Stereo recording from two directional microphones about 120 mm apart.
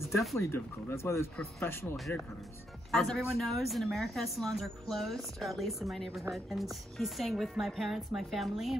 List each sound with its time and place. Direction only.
0.4 s speech: 20° left (ahead or behind)
2.9 s speech: centre (ahead or behind)